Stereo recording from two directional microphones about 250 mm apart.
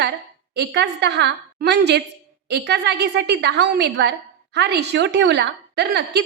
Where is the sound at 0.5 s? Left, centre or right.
Right.